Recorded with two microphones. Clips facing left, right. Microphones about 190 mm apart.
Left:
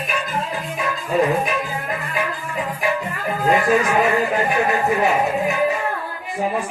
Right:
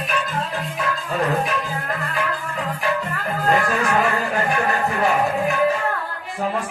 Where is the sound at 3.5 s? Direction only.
20° left (ahead or behind).